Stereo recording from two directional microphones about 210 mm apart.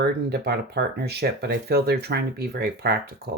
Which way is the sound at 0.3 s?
50° right (ahead or behind).